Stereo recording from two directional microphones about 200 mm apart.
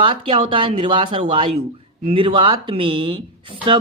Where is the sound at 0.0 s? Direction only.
25° right (ahead or behind).